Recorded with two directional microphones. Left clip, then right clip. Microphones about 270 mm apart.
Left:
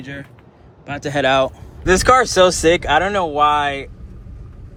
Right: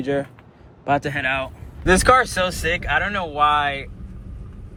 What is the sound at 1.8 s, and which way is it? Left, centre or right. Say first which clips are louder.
Speech: left 2 dB; centre.